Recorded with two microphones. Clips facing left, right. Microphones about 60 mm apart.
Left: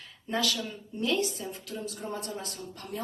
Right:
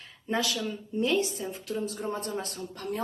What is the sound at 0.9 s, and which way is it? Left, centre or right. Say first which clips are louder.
A woman's voice: right 2 dB; right.